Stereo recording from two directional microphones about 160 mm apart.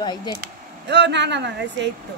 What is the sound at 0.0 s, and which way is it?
Speech, 25° left (ahead or behind).